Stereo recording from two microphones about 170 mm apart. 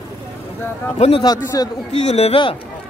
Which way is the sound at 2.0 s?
40° left (ahead or behind).